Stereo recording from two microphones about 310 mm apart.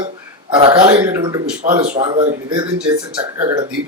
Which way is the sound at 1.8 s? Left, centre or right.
Right.